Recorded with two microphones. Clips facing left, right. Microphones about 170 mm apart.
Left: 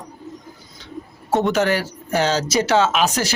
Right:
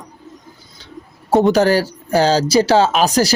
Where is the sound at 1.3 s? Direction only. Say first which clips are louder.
Right 6 dB; 35° right (ahead or behind).